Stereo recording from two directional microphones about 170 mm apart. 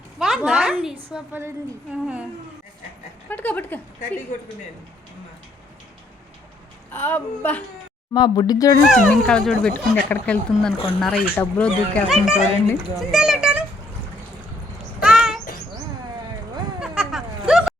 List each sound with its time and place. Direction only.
0.2 s a woman's voice: centre (ahead or behind)
3.2 s speech: 10° left (ahead or behind)
6.9 s speech: 10° left (ahead or behind)
8.1 s speech: 25° left (ahead or behind)
8.9 s speech: 5° left (ahead or behind)
12.0 s speech: 5° right (ahead or behind)
15.0 s bird: 5° right (ahead or behind)
16.8 s a sound: centre (ahead or behind)